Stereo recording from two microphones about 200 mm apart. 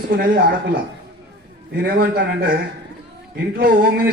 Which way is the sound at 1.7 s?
55° right (ahead or behind).